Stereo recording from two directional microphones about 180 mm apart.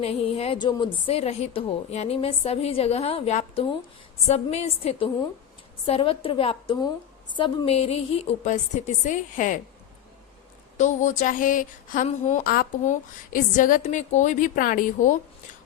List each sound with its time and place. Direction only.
0.0 s a woman's voice: 35° left (ahead or behind)
10.8 s a woman's voice: 45° left (ahead or behind)